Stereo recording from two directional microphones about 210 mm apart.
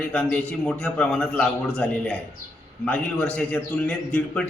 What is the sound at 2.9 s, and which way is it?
A man's voice, 5° left (ahead or behind).